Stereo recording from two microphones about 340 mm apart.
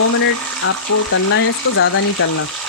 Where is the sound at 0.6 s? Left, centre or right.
Left.